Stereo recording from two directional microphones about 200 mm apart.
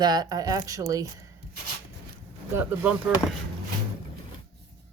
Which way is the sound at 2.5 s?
10° right (ahead or behind).